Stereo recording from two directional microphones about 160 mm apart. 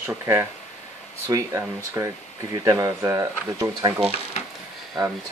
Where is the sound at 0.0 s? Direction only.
15° right (ahead or behind).